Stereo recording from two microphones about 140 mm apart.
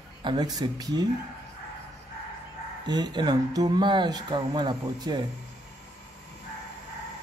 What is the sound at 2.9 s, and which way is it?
Speech, 30° right (ahead or behind).